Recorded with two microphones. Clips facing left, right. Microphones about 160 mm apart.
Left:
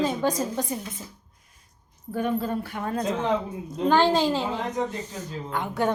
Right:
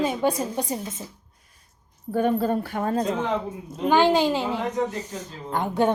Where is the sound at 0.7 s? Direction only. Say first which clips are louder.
Right 2 dB; 25° right (ahead or behind).